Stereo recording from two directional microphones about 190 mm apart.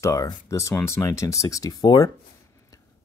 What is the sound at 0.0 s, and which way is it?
Speech, 15° left (ahead or behind).